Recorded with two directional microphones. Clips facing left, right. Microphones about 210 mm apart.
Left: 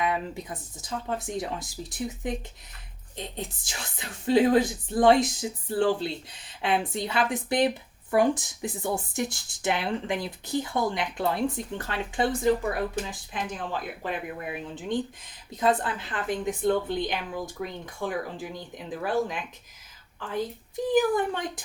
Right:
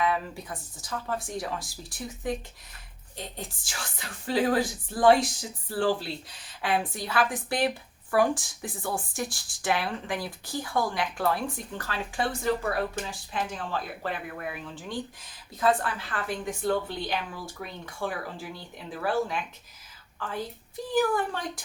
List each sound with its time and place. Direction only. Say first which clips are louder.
0.0 s a woman's voice: even; 20° left (ahead or behind)